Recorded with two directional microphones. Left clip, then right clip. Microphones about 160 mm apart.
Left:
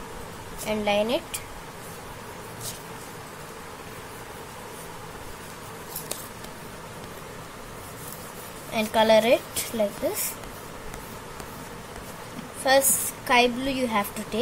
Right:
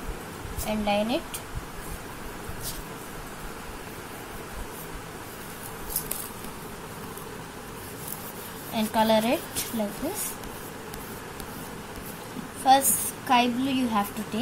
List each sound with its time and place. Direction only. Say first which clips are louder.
0.7 s a woman's voice: left 2 dB; 40° left (ahead or behind)
8.7 s a woman's voice: left 4 dB; 35° left (ahead or behind)
12.6 s a woman's voice: right 1 dB; 40° left (ahead or behind)